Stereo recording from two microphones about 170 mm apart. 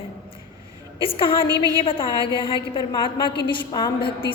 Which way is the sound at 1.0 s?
30° left (ahead or behind).